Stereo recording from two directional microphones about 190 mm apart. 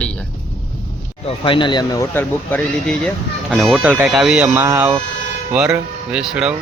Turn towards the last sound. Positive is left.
turn(degrees=-5)  # may be behind; listen again after turning